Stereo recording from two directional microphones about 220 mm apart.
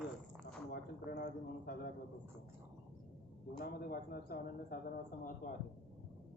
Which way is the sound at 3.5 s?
45° left (ahead or behind).